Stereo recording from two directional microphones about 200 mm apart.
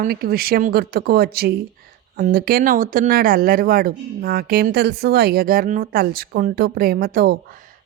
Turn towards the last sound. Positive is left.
turn(degrees=-50)  # may be behind; listen again after turning